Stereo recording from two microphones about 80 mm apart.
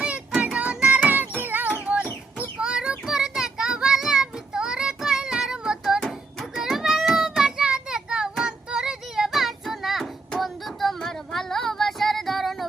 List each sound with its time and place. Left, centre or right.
0.5 s music: centre
2.6 s child singing: centre